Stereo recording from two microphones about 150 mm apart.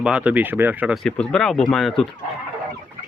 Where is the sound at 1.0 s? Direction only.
5° left (ahead or behind).